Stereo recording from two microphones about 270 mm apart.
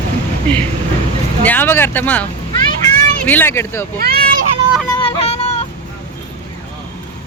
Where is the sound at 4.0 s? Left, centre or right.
Right.